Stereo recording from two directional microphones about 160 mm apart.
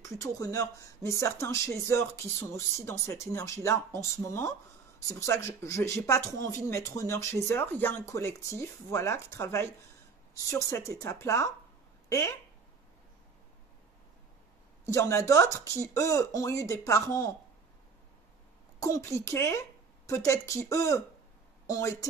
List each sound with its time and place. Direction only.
0.0 s speech: 20° left (ahead or behind)
14.9 s speech: 20° left (ahead or behind)
18.8 s a woman's voice: 20° left (ahead or behind)